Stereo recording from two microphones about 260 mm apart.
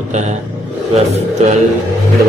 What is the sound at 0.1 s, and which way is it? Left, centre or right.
Speech, right.